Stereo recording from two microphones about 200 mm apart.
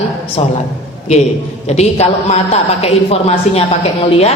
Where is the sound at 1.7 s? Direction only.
30° left (ahead or behind).